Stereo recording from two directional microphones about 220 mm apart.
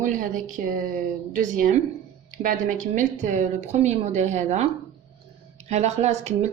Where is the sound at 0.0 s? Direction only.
35° right (ahead or behind).